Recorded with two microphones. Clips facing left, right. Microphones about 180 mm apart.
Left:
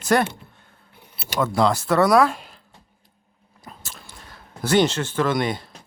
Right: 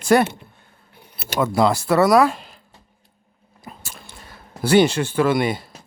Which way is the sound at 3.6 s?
10° right (ahead or behind).